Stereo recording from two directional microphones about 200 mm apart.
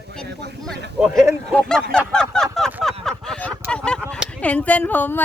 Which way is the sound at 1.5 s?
5° left (ahead or behind).